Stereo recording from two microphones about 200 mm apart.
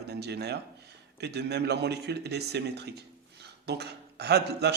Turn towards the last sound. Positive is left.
turn(degrees=-55)  # may be behind; listen again after turning